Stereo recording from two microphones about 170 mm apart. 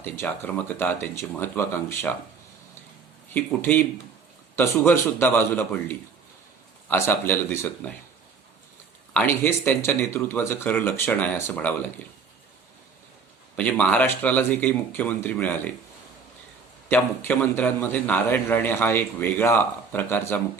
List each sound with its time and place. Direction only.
0.0 s a man's voice: 10° left (ahead or behind)
3.3 s a man's voice: 10° left (ahead or behind)
9.1 s a man's voice: 10° left (ahead or behind)
13.6 s a man's voice: 10° left (ahead or behind)
16.9 s a man's voice: 15° left (ahead or behind)